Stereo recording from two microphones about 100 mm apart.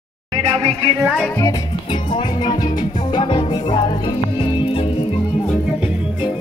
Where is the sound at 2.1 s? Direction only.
50° left (ahead or behind).